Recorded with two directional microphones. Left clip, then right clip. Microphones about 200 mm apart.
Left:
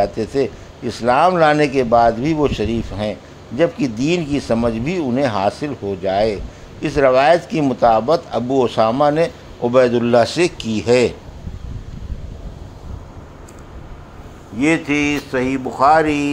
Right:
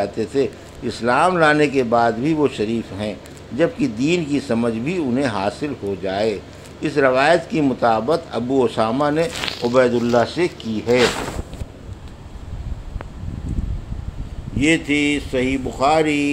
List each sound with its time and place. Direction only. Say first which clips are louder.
0.0 s speech: left 2 dB; 25° left (ahead or behind)
14.7 s mantra: left 1 dB; centre (ahead or behind)